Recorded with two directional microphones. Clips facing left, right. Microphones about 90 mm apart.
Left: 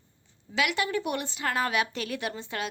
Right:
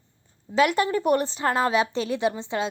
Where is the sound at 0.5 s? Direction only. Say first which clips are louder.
Right 7 dB; 40° right (ahead or behind).